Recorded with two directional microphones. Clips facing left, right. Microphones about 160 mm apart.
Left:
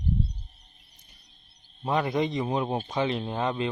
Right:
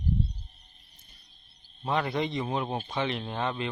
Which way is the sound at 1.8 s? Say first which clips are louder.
Left 3 dB; 20° left (ahead or behind).